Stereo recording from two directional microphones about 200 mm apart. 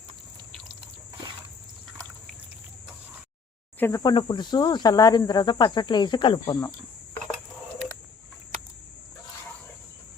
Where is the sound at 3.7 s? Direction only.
15° left (ahead or behind).